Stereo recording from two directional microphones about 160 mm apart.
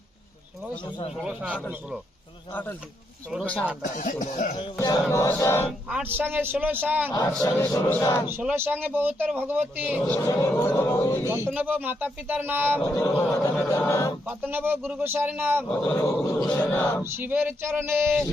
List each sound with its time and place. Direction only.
1.2 s speech: 5° right (ahead or behind)
2.5 s speech: 10° left (ahead or behind)
3.9 s speech: 55° left (ahead or behind)
4.5 s speech: 25° left (ahead or behind)
6.0 s speech: 15° right (ahead or behind)
7.1 s speech: 25° left (ahead or behind)
8.3 s speech: 10° right (ahead or behind)
10.2 s speech: 20° left (ahead or behind)
11.3 s speech: 15° right (ahead or behind)
12.8 s a sound: 15° left (ahead or behind)
14.3 s speech: 10° right (ahead or behind)
15.7 s speech: 5° left (ahead or behind)
17.0 s speech: 15° right (ahead or behind)